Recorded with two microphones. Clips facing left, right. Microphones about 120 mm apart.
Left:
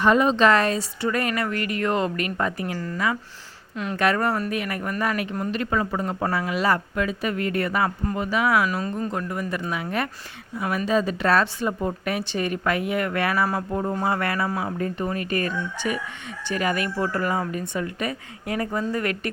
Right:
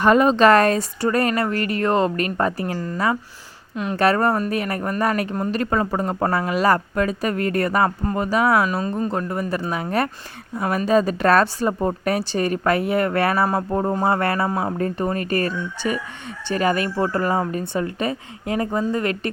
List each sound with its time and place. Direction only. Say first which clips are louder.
0.0 s speech: right 4 dB; 50° right (ahead or behind)
2.7 s speech: right 3 dB; 25° right (ahead or behind)
3.9 s speech: right 4 dB; 35° right (ahead or behind)